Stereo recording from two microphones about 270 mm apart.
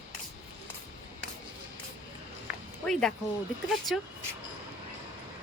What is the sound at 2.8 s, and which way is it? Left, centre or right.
Speech, centre.